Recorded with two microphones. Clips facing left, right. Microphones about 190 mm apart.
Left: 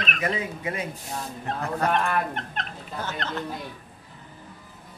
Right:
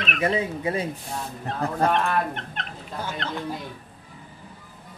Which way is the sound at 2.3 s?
40° left (ahead or behind).